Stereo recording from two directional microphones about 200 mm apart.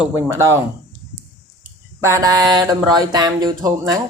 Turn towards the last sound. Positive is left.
turn(degrees=-20)  # may be behind; listen again after turning